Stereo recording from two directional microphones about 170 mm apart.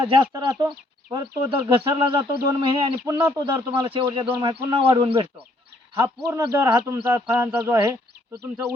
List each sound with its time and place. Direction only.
0.0 s speech: 25° right (ahead or behind)
5.9 s speech: 20° right (ahead or behind)